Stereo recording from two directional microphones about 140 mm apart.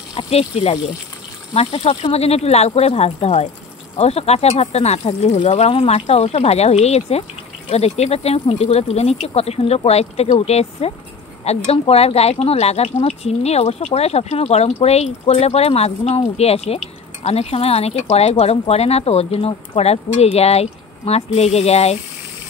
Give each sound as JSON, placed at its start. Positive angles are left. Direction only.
{"t": 0.1, "sound": "speech", "side_deg": 45}